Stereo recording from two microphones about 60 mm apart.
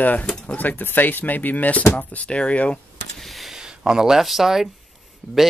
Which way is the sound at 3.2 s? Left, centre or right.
Centre.